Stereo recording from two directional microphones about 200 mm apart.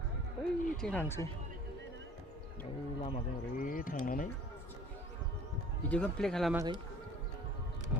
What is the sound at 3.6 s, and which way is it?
Speech, 45° left (ahead or behind).